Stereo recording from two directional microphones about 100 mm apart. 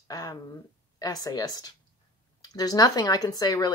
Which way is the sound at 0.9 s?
35° left (ahead or behind).